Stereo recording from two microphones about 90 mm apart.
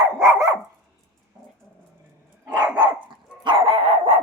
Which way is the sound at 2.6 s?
55° right (ahead or behind).